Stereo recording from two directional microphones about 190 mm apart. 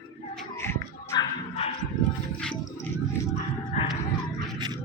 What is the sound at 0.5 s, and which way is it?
Dog, 15° left (ahead or behind).